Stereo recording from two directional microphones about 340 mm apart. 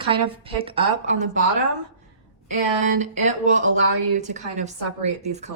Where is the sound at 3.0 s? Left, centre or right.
Right.